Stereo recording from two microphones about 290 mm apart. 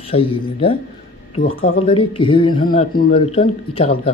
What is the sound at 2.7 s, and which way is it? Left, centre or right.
Speech, left.